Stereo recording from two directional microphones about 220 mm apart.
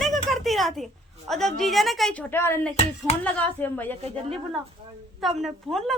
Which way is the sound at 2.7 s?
30° left (ahead or behind).